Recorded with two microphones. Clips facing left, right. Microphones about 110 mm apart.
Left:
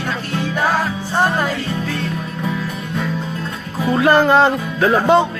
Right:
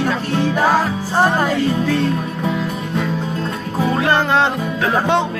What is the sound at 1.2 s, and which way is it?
Music, 30° right (ahead or behind).